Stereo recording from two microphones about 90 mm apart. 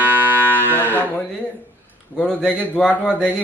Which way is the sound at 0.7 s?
20° left (ahead or behind).